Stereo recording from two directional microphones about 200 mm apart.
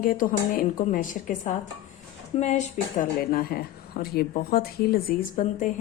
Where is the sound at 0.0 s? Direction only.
45° left (ahead or behind).